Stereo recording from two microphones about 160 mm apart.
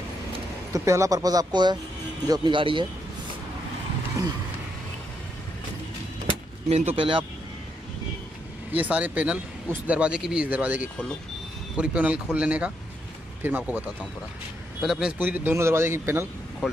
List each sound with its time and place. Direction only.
0.7 s speech: 20° right (ahead or behind)
7.0 s speech: 35° right (ahead or behind)
8.7 s speech: 10° right (ahead or behind)
16.6 s speech: 5° right (ahead or behind)